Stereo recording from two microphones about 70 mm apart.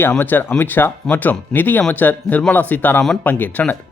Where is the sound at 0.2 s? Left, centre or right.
Left.